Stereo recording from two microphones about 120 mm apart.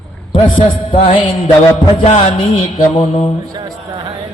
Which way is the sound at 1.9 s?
55° left (ahead or behind).